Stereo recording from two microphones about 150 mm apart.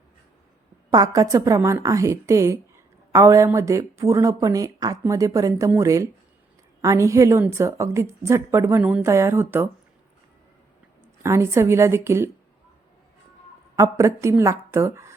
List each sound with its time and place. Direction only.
0.9 s a woman's voice: 25° right (ahead or behind)
11.2 s a woman's voice: 20° right (ahead or behind)
13.7 s a woman's voice: 20° right (ahead or behind)